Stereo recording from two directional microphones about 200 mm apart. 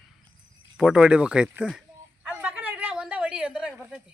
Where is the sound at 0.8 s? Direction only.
5° right (ahead or behind).